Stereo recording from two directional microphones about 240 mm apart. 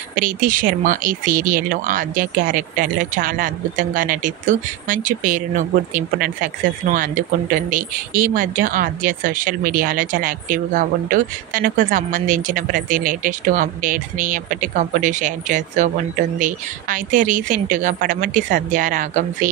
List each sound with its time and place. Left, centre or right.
0.1 s speech: right